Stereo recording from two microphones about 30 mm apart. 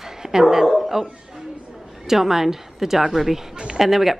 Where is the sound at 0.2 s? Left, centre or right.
Centre.